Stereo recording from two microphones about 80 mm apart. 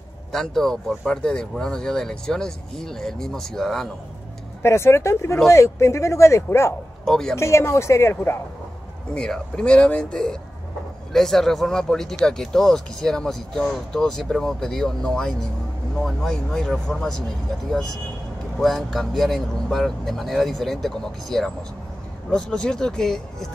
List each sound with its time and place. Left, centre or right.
0.3 s speech: centre
4.6 s speech: left
7.1 s speech: centre
7.3 s speech: left
9.1 s speech: centre
18.6 s speech: centre